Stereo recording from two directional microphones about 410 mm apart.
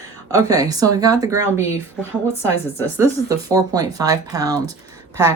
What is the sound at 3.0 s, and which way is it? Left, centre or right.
Speech, centre.